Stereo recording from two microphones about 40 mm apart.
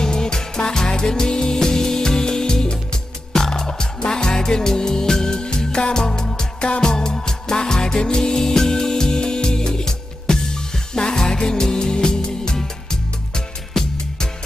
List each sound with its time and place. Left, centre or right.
0.0 s music: centre